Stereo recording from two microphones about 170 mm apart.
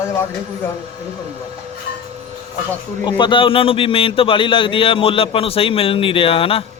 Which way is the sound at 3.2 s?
30° left (ahead or behind).